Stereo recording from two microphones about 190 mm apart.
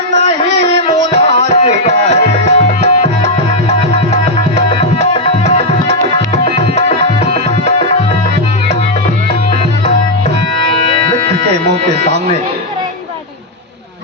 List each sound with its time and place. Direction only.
0.3 s music: 35° left (ahead or behind)
4.7 s music: 30° left (ahead or behind)
6.3 s tabla: 35° left (ahead or behind)